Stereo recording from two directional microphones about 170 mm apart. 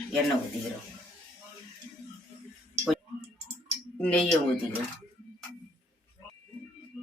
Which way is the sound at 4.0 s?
5° left (ahead or behind).